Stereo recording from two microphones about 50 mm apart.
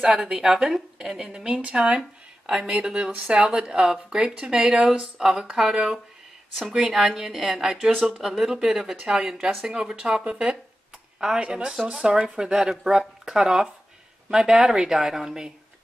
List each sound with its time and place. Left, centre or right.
0.0 s speech: centre
2.0 s a sound: centre
2.6 s speech: centre